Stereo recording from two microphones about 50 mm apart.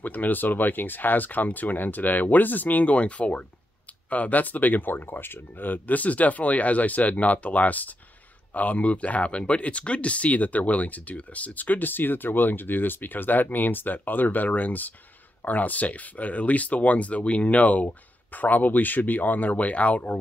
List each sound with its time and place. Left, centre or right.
0.0 s speech: left